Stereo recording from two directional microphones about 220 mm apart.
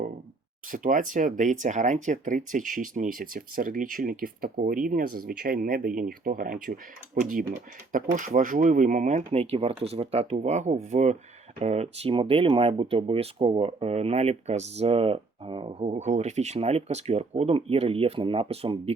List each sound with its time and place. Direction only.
0.7 s speech: 40° right (ahead or behind)